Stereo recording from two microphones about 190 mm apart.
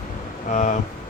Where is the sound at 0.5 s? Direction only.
40° left (ahead or behind).